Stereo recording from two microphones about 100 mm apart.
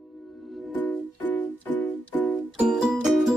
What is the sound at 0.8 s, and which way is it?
Music, 15° left (ahead or behind).